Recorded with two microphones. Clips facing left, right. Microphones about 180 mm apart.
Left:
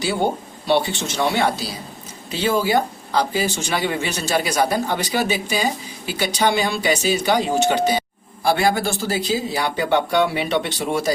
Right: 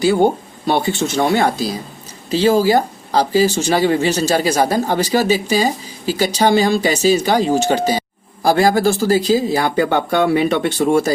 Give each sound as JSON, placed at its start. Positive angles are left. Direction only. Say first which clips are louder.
{"t": 0.7, "sound": "speech", "louder": "right 3 dB", "side_deg": -45}